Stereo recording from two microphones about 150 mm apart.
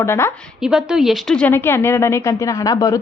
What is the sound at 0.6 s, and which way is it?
A woman's voice, 5° right (ahead or behind).